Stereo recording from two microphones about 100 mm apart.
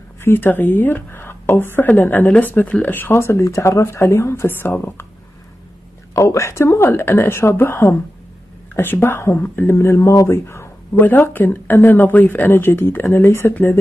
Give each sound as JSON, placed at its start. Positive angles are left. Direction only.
{"t": 0.2, "sound": "a woman's voice", "side_deg": 20}
{"t": 6.1, "sound": "speech", "side_deg": 30}